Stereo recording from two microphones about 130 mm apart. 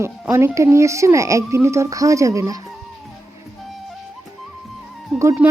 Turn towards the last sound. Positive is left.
turn(degrees=-20)  # may be behind; listen again after turning